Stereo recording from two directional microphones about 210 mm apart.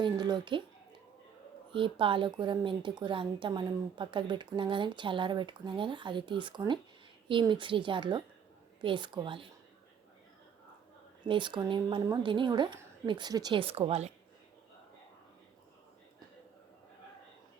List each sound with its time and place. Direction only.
0.0 s a woman's voice: 20° right (ahead or behind)
1.7 s a woman's voice: 25° right (ahead or behind)
11.3 s a woman's voice: 20° right (ahead or behind)